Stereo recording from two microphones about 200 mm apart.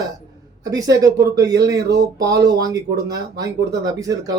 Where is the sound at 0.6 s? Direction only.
15° right (ahead or behind).